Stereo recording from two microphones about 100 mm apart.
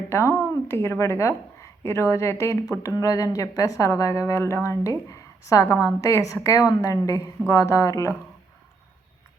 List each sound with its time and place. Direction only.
0.1 s a woman's voice: 30° left (ahead or behind)